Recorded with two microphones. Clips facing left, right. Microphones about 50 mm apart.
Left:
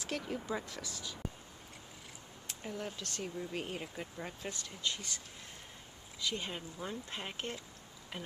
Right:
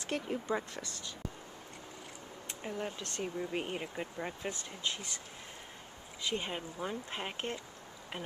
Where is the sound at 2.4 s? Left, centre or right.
Centre.